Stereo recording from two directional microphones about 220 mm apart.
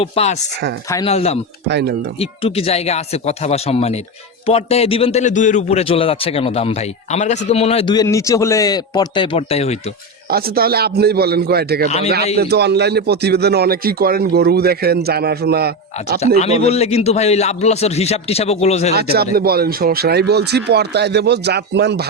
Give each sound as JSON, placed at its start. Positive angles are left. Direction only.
{"t": 0.0, "sound": "a man's voice", "side_deg": 30}
{"t": 1.6, "sound": "a man's voice", "side_deg": -50}
{"t": 2.1, "sound": "a man's voice", "side_deg": 25}
{"t": 10.2, "sound": "a man's voice", "side_deg": -45}
{"t": 11.9, "sound": "a man's voice", "side_deg": 30}
{"t": 12.4, "sound": "a man's voice", "side_deg": -50}
{"t": 16.4, "sound": "a man's voice", "side_deg": 30}
{"t": 18.9, "sound": "a man's voice", "side_deg": -45}